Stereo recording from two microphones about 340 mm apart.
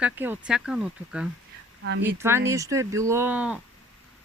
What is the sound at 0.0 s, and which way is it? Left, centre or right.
Speech, centre.